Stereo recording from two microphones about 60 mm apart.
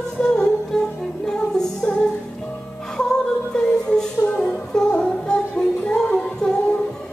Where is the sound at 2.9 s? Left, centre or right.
Centre.